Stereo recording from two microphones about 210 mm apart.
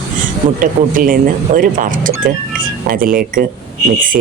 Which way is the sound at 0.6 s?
40° right (ahead or behind).